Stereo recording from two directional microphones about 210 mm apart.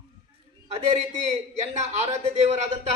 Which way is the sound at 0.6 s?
30° right (ahead or behind).